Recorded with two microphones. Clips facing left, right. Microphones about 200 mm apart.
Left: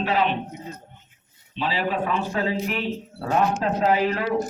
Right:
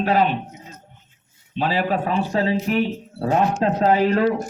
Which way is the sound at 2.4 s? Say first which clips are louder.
Right 4 dB; 20° right (ahead or behind).